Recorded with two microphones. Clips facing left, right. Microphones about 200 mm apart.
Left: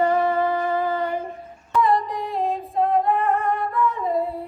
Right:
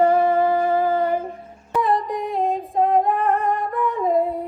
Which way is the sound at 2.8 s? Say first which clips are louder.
Right 2 dB; 45° right (ahead or behind).